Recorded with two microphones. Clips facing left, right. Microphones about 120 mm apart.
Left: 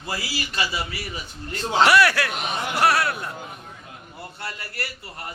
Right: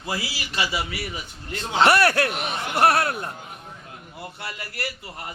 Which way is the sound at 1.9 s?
45° right (ahead or behind).